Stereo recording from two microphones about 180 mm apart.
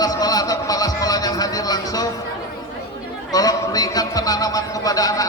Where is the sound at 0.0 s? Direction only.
20° left (ahead or behind).